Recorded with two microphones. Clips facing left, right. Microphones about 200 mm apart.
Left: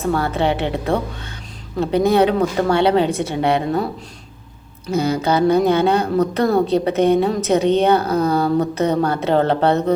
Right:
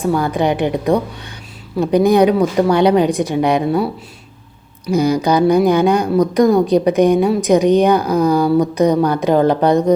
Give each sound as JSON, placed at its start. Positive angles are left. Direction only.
{"t": 0.0, "sound": "speech", "side_deg": -15}
{"t": 4.9, "sound": "speech", "side_deg": -15}